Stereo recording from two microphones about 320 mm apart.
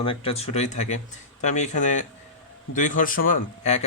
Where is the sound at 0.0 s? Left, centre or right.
Centre.